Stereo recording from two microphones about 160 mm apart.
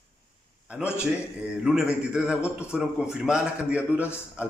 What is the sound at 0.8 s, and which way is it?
A man's voice, 5° right (ahead or behind).